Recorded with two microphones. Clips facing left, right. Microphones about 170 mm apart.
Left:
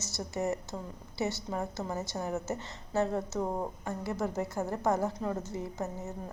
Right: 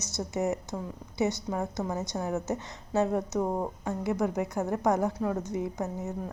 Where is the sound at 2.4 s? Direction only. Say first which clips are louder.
Right 4 dB; 15° right (ahead or behind).